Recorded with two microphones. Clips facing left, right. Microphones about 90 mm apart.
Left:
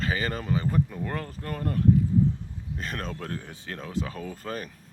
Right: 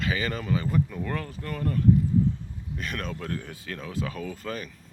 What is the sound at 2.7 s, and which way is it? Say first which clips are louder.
Speech: right 1 dB; 35° left (ahead or behind).